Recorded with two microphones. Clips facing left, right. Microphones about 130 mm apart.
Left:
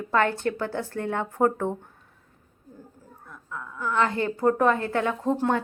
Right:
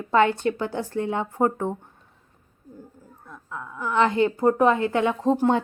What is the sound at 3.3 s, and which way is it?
A woman's voice, 20° right (ahead or behind).